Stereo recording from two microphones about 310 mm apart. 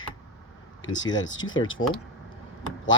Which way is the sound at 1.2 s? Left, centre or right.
Left.